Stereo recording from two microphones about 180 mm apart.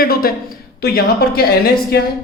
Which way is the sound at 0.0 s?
55° left (ahead or behind).